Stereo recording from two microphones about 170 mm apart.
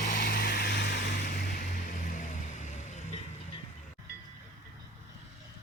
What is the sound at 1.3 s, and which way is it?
Vehicle, 60° left (ahead or behind).